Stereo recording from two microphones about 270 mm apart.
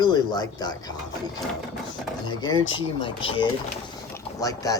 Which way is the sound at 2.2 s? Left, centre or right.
Centre.